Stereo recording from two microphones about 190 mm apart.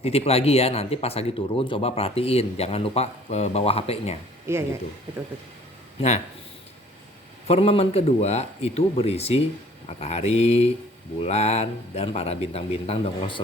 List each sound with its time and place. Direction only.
0.0 s speech: 30° left (ahead or behind)
4.5 s speech: 15° right (ahead or behind)
6.0 s speech: 35° left (ahead or behind)
7.4 s speech: 30° left (ahead or behind)